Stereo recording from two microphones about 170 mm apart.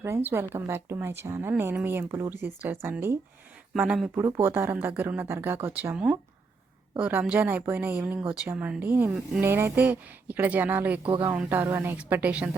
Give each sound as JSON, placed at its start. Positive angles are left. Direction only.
{"t": 0.0, "sound": "speech", "side_deg": -15}
{"t": 4.1, "sound": "speech", "side_deg": -15}
{"t": 11.0, "sound": "speech", "side_deg": -30}
{"t": 11.3, "sound": "speech", "side_deg": -10}